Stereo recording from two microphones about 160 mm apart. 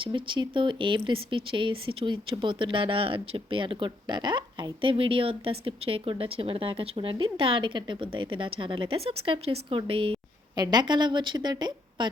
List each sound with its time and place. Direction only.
0.0 s speech: 30° right (ahead or behind)